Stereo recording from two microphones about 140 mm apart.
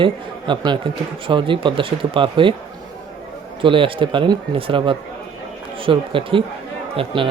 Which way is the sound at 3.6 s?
40° right (ahead or behind).